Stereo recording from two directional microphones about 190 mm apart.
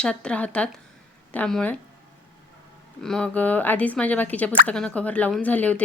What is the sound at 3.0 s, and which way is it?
Speech, 5° left (ahead or behind).